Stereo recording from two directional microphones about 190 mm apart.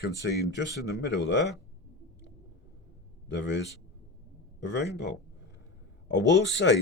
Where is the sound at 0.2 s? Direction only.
70° left (ahead or behind).